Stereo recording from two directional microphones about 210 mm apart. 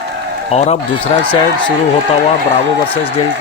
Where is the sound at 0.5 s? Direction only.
30° left (ahead or behind).